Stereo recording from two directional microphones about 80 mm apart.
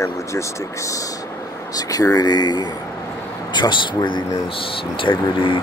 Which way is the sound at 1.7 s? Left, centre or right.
Left.